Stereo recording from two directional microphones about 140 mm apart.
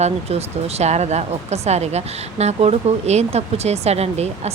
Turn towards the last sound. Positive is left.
turn(degrees=-50)  # may be behind; listen again after turning